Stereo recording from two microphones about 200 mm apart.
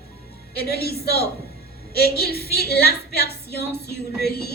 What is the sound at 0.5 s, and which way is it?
Speech, 50° left (ahead or behind).